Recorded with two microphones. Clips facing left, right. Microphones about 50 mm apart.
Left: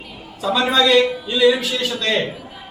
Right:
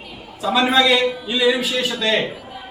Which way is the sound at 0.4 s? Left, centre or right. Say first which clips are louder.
Right 1 dB; centre.